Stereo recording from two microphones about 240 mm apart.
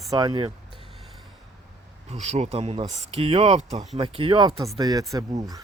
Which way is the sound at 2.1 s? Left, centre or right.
Right.